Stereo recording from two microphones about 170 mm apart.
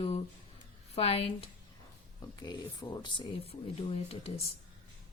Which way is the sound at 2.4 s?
25° left (ahead or behind).